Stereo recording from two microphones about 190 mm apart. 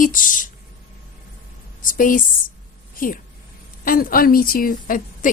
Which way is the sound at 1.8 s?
45° left (ahead or behind).